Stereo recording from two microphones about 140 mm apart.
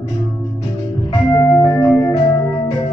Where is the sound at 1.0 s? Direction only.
30° left (ahead or behind).